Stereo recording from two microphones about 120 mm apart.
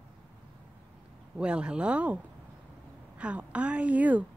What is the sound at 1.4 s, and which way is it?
Speech, 10° right (ahead or behind).